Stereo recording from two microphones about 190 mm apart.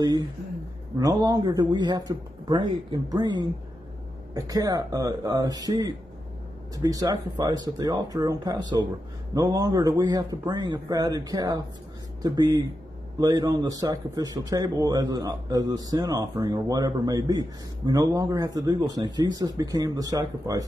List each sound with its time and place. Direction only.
0.0 s a man's voice: 20° right (ahead or behind)